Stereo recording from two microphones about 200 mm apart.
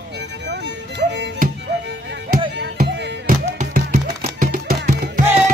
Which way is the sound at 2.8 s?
40° right (ahead or behind).